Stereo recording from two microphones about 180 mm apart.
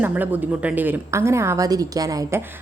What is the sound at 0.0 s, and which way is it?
A woman's voice, 10° right (ahead or behind).